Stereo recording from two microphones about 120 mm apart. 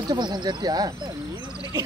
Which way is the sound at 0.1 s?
40° right (ahead or behind).